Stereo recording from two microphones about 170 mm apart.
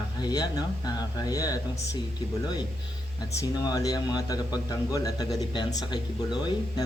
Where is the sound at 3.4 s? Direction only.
20° left (ahead or behind).